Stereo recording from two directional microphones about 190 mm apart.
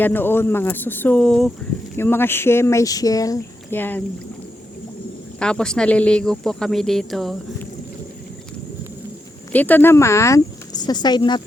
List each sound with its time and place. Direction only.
0.0 s speech: 10° left (ahead or behind)
5.4 s speech: 5° left (ahead or behind)
9.5 s speech: 10° left (ahead or behind)